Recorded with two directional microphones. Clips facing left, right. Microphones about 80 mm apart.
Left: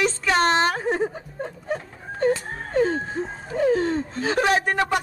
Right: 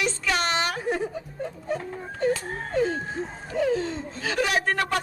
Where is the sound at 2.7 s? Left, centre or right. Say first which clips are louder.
Left 4 dB; left.